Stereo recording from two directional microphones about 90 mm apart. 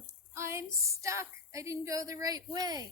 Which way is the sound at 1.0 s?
35° right (ahead or behind).